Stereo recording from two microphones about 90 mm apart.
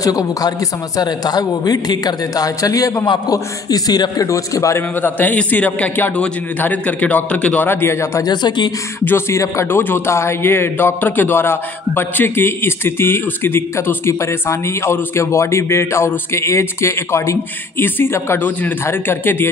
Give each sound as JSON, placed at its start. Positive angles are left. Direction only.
{"t": 0.0, "sound": "a man's voice", "side_deg": 40}
{"t": 5.0, "sound": "a man's voice", "side_deg": 20}
{"t": 8.3, "sound": "a man's voice", "side_deg": 55}
{"t": 9.0, "sound": "a man's voice", "side_deg": 30}